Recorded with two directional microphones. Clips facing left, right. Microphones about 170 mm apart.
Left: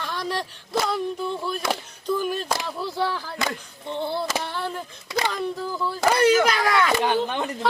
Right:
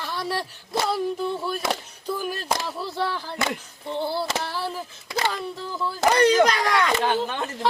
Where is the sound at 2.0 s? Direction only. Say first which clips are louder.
Left 8 dB; 5° right (ahead or behind).